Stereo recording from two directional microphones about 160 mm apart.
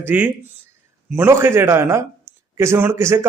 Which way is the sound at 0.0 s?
10° right (ahead or behind).